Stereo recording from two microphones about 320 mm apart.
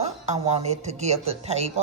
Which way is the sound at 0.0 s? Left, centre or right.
Right.